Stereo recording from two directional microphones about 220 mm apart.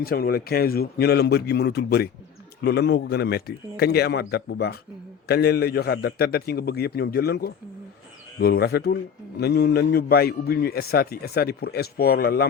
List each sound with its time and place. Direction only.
0.0 s a man's voice: 45° left (ahead or behind)